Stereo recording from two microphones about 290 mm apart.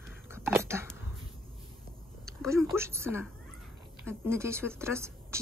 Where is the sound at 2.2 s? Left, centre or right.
Centre.